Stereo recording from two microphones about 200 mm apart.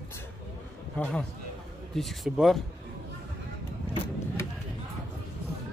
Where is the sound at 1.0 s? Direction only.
5° left (ahead or behind).